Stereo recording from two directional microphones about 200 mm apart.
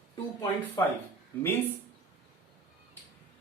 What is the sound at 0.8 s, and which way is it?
Speech, 15° left (ahead or behind).